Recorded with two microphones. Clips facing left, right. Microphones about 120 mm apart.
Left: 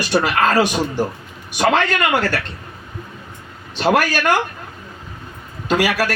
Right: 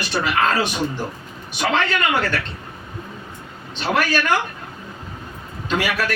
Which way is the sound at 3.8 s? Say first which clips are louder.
Left 5 dB; 40° left (ahead or behind).